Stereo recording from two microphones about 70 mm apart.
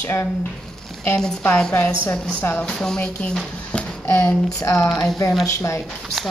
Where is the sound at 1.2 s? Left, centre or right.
Centre.